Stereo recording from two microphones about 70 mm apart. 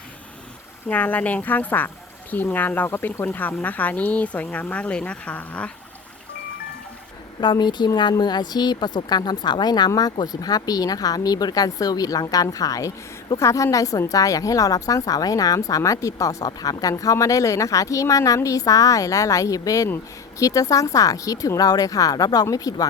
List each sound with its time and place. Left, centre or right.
0.9 s speech: left
7.5 s a woman's voice: left
13.3 s speech: left
16.5 s speech: left
17.0 s speech: left